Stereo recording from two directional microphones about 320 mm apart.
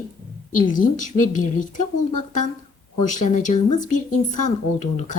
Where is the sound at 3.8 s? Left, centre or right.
Left.